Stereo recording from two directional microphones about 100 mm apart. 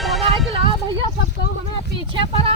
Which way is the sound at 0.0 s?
Centre (ahead or behind).